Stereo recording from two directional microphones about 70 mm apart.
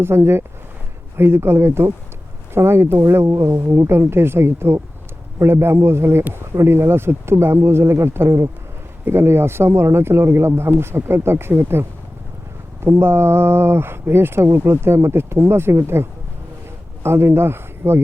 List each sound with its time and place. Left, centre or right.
0.0 s a man's voice: right